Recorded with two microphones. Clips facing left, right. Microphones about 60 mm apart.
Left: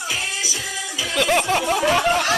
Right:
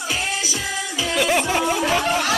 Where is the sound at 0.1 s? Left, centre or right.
Right.